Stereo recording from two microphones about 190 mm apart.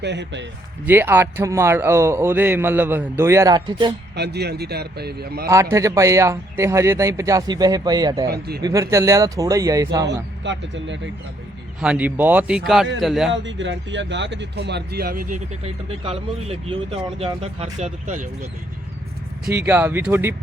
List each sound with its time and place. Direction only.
0.0 s a man's voice: 65° right (ahead or behind)
0.9 s a man's voice: 10° right (ahead or behind)
4.1 s a man's voice: 60° right (ahead or behind)
5.5 s a man's voice: 15° right (ahead or behind)
8.3 s a man's voice: 55° right (ahead or behind)
8.6 s a man's voice: 15° right (ahead or behind)
10.1 s speech: 70° right (ahead or behind)
11.8 s a man's voice: 5° right (ahead or behind)
13.3 s speech: 75° right (ahead or behind); by 15.4 s 50° right (ahead or behind)
15.6 s speech: 30° right (ahead or behind)
19.5 s a man's voice: 10° right (ahead or behind)